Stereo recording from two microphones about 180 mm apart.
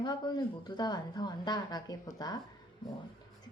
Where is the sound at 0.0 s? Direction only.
25° left (ahead or behind).